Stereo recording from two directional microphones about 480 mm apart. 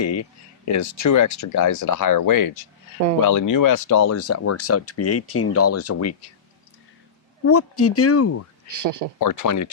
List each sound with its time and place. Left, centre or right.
0.0 s speech: left
7.4 s speech: left
8.6 s speech: right
9.2 s speech: left